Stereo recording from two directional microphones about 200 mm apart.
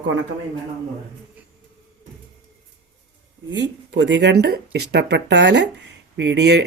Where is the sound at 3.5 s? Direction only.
65° right (ahead or behind).